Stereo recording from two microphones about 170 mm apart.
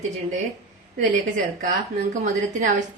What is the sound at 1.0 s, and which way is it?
A woman's voice, 45° right (ahead or behind).